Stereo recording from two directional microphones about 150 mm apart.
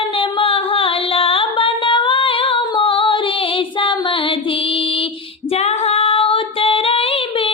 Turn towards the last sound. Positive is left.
turn(degrees=40)  # may be behind; listen again after turning